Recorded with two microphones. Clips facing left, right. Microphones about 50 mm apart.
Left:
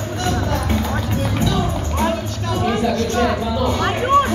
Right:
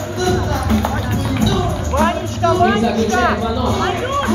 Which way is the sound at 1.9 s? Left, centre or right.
Right.